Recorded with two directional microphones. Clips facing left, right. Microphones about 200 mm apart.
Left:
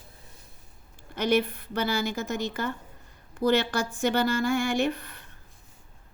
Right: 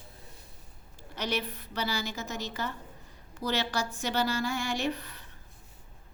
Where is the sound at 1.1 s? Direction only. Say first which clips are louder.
Left 9 dB; 55° left (ahead or behind).